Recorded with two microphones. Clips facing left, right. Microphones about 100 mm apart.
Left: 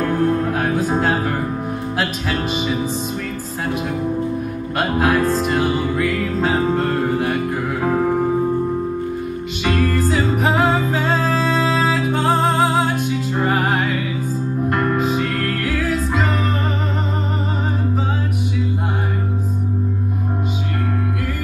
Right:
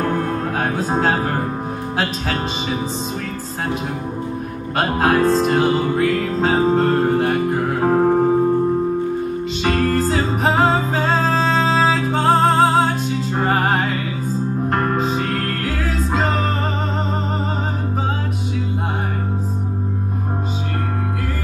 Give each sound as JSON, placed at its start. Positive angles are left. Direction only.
{"t": 0.6, "sound": "music", "side_deg": -25}
{"t": 4.7, "sound": "music", "side_deg": -30}
{"t": 9.6, "sound": "music", "side_deg": -30}